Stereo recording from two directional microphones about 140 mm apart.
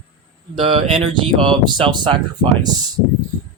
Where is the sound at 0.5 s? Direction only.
40° right (ahead or behind).